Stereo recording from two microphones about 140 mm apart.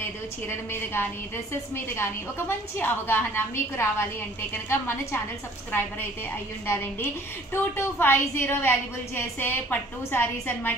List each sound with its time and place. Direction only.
0.5 s a woman's voice: 15° left (ahead or behind)